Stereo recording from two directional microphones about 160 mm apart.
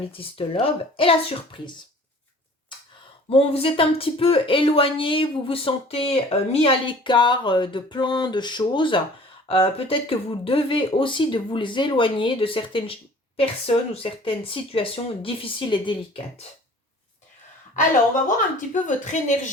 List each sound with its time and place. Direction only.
0.1 s speech: 35° left (ahead or behind)
3.2 s speech: 40° left (ahead or behind)
18.7 s speech: 50° left (ahead or behind)